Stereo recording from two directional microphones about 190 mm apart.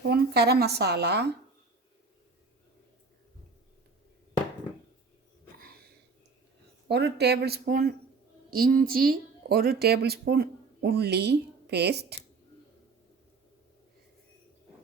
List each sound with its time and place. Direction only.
0.1 s a woman's voice: 55° right (ahead or behind)
6.8 s speech: 60° right (ahead or behind)